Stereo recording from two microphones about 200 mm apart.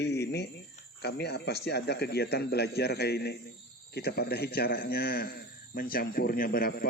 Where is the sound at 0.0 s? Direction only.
55° left (ahead or behind).